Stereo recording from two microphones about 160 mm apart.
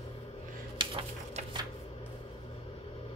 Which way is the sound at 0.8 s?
30° right (ahead or behind).